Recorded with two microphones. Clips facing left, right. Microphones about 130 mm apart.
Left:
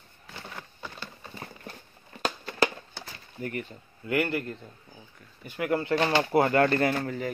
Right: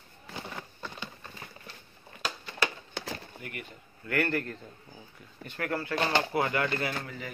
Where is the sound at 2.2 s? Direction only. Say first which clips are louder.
Left 6 dB; 50° left (ahead or behind).